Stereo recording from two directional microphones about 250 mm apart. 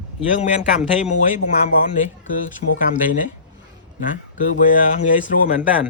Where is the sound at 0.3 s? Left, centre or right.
Left.